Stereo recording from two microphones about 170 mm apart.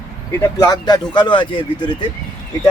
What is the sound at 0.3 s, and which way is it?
Speech, 15° left (ahead or behind).